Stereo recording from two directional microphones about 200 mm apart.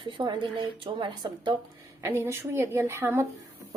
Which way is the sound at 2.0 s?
15° right (ahead or behind).